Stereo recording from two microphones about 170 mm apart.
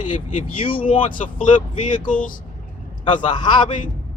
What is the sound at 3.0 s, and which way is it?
Speech, 25° left (ahead or behind).